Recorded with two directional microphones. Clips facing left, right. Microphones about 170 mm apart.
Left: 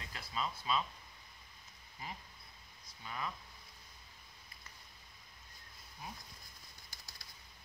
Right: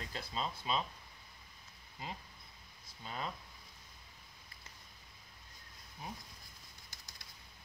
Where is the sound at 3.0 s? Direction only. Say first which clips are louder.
Right 1 dB; 30° right (ahead or behind).